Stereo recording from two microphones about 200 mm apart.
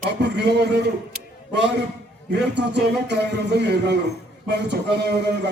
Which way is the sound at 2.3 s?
60° right (ahead or behind).